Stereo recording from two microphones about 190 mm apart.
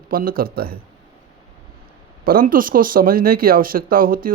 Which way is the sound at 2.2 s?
50° right (ahead or behind).